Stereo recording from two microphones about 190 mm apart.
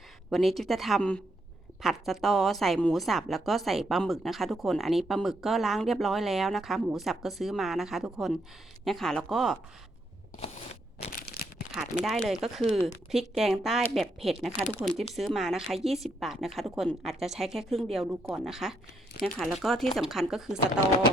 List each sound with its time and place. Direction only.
0.3 s a woman's voice: centre (ahead or behind)
11.1 s crushing: 50° left (ahead or behind)
12.0 s a woman's voice: centre (ahead or behind)